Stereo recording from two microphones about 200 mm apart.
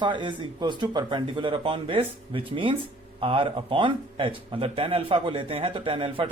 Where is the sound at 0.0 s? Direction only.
25° right (ahead or behind).